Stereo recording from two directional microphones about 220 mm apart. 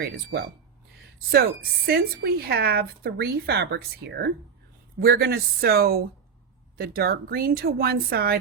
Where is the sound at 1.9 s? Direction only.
45° right (ahead or behind).